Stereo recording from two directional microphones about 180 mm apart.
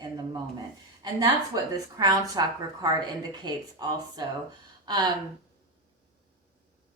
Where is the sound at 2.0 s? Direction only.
20° right (ahead or behind).